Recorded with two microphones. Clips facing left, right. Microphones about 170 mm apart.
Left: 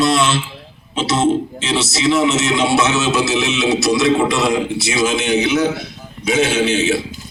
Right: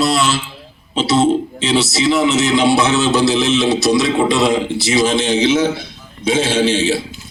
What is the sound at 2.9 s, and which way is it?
Speech, 30° right (ahead or behind).